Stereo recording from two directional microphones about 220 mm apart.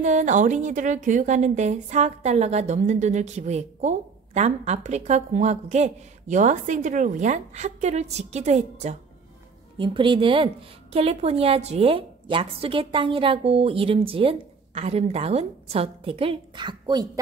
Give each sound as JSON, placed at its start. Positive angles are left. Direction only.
{"t": 0.0, "sound": "a woman's voice", "side_deg": -35}